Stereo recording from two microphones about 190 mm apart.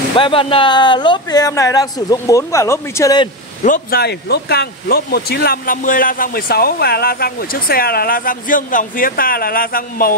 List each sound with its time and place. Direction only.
0.1 s speech: 30° left (ahead or behind)
3.6 s speech: 50° left (ahead or behind)